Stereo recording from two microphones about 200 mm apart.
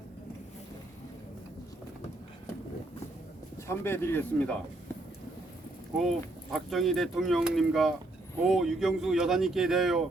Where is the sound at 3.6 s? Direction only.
10° left (ahead or behind).